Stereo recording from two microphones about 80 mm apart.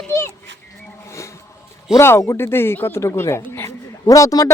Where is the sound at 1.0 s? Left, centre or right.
Left.